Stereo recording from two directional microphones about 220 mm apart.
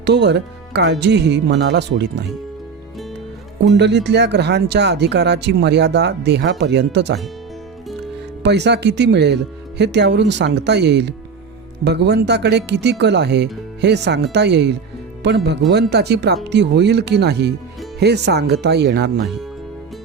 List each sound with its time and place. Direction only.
0.0 s speech: 50° right (ahead or behind)
3.8 s speech: 50° right (ahead or behind)
8.4 s speech: 50° right (ahead or behind)